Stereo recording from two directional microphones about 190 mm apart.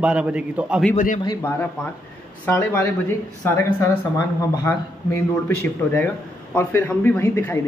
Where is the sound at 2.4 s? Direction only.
10° left (ahead or behind).